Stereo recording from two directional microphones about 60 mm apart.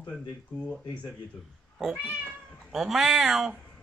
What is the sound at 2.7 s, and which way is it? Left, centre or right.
Speech, centre.